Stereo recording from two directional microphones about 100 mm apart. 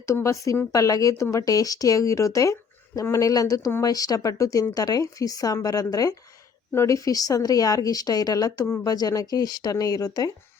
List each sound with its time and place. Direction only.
0.0 s speech: 30° left (ahead or behind)